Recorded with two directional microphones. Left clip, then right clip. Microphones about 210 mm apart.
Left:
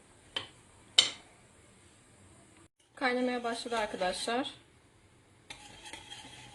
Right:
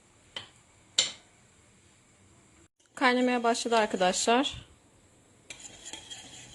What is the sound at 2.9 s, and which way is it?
Speech, 40° right (ahead or behind).